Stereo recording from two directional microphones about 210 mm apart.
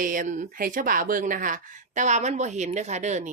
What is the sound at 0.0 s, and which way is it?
Speech, 40° right (ahead or behind).